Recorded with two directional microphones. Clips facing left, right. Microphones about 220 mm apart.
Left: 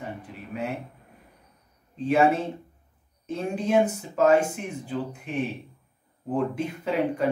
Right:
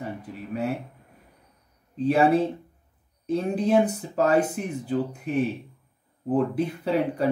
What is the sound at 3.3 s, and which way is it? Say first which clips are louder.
Speech: right 4 dB; 35° right (ahead or behind).